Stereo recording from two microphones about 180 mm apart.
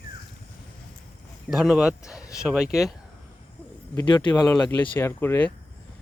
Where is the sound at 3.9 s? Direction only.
25° left (ahead or behind).